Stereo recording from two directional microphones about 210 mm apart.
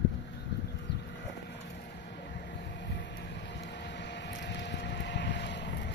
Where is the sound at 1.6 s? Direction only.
55° left (ahead or behind).